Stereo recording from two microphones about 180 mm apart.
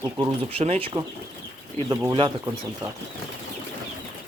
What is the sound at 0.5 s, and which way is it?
Speech, 35° right (ahead or behind).